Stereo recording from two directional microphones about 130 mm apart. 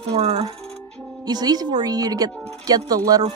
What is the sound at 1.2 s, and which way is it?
Speech, 30° right (ahead or behind).